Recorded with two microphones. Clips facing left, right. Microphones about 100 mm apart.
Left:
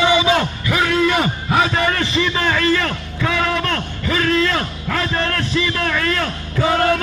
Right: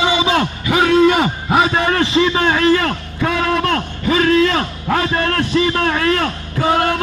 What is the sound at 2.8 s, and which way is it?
A man's voice, 40° right (ahead or behind).